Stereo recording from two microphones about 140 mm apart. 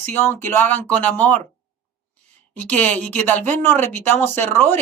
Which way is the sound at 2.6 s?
10° left (ahead or behind).